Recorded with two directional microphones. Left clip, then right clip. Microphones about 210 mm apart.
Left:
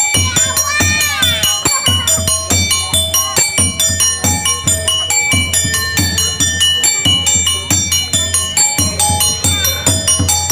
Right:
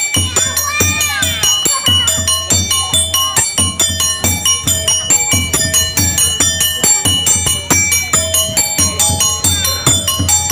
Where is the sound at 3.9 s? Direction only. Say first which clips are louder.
Left 1 dB; 5° right (ahead or behind).